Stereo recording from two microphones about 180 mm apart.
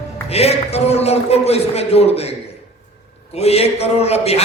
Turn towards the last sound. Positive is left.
turn(degrees=35)  # may be behind; listen again after turning